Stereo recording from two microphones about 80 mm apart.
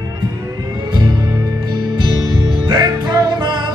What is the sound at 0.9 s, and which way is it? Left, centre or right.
Music, right.